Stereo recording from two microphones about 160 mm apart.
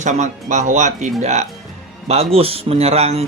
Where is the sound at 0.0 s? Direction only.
50° right (ahead or behind).